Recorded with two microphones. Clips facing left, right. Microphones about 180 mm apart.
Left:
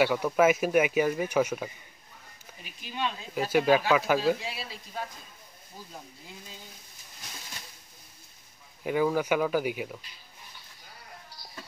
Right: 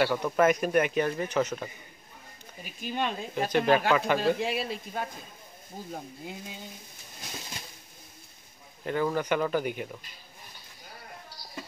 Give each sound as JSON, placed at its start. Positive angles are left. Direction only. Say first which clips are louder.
{"t": 0.0, "sound": "speech", "louder": "left 1 dB", "side_deg": 5}
{"t": 2.6, "sound": "speech", "louder": "right 2 dB", "side_deg": -50}
{"t": 3.3, "sound": "speech", "louder": "left 1 dB", "side_deg": 5}
{"t": 4.4, "sound": "speech", "louder": "right 9 dB", "side_deg": -55}
{"t": 8.8, "sound": "speech", "louder": "left 2 dB", "side_deg": 10}